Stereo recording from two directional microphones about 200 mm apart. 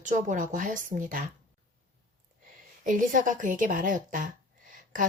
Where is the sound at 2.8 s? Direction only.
40° right (ahead or behind).